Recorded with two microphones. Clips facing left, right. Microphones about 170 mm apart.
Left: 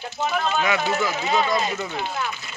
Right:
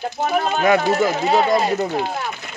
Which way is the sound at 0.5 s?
45° right (ahead or behind).